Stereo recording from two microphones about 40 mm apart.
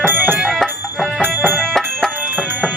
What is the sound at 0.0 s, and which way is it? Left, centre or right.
Music, right.